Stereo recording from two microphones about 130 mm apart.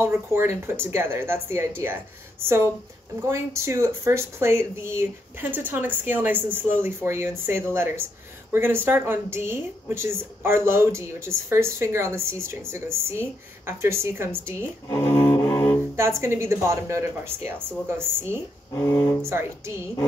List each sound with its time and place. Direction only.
0.0 s a woman's voice: 20° right (ahead or behind)
14.9 s cello: 25° left (ahead or behind)
16.2 s a woman's voice: 20° right (ahead or behind)
18.7 s speech: 20° left (ahead or behind)